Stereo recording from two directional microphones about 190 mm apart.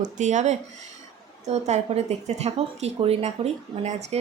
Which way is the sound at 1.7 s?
35° right (ahead or behind).